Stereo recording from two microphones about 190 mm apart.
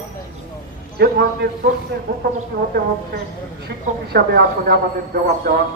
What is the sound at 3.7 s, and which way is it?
Speech, 55° right (ahead or behind).